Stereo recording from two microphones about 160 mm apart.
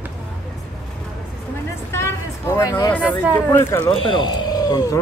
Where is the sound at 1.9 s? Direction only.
15° left (ahead or behind).